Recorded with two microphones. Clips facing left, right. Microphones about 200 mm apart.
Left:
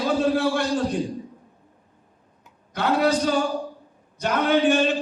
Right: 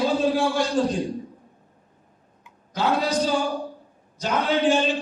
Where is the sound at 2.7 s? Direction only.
60° left (ahead or behind).